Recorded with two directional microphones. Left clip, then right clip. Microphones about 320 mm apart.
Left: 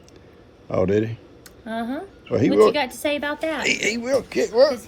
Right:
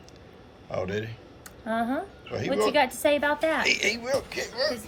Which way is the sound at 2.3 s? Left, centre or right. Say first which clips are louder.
Left 10 dB; centre.